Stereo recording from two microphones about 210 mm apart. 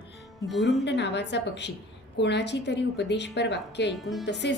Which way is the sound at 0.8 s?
55° left (ahead or behind).